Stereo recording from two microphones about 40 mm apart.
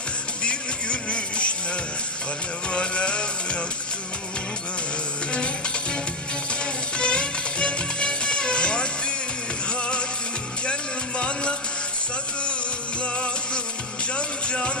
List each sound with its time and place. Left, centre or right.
0.4 s music: left
2.7 s music: left
7.0 s music: left
10.7 s a sound: left
14.1 s music: left